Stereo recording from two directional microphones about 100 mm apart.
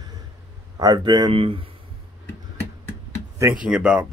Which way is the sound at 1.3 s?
65° right (ahead or behind).